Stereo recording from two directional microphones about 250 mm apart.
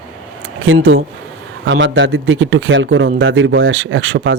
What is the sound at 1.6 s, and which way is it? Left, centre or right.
Speech, right.